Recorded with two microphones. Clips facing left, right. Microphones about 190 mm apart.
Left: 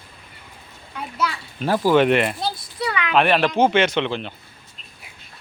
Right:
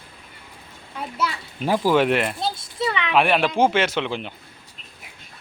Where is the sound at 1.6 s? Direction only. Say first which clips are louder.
Left 2 dB; 10° right (ahead or behind).